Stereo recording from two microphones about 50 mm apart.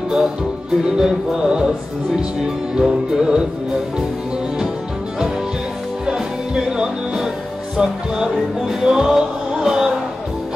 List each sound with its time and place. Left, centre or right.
0.9 s music: centre
6.0 s music: centre